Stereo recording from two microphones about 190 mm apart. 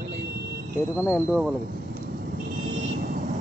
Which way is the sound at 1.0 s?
10° left (ahead or behind).